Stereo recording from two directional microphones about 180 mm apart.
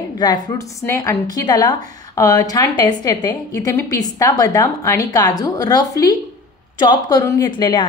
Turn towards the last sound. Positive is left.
turn(degrees=25)  # may be behind; listen again after turning